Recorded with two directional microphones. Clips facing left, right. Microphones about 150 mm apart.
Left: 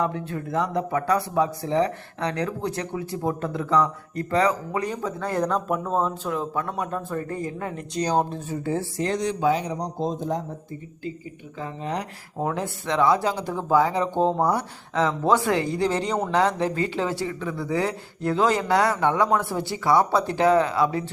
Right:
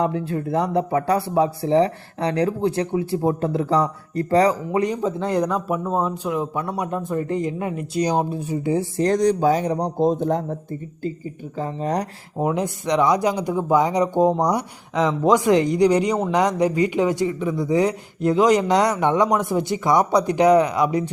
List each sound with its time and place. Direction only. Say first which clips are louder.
0.3 s a man's voice: right 4 dB; 30° right (ahead or behind); by 8.9 s 15° right (ahead or behind)
9.0 s speech: right 9 dB; 45° right (ahead or behind); by 10.4 s 60° right (ahead or behind)
11.5 s speech: right 6 dB; 40° right (ahead or behind)
12.4 s a man's voice: right 5 dB; 15° right (ahead or behind)